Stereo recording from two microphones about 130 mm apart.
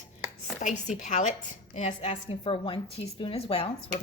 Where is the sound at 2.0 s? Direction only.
45° left (ahead or behind).